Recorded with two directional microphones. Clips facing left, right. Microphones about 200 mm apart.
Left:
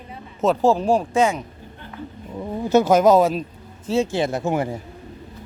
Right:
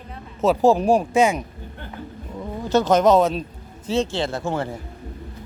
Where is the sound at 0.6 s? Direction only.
15° right (ahead or behind).